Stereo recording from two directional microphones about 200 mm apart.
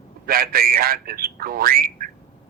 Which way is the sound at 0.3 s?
50° right (ahead or behind).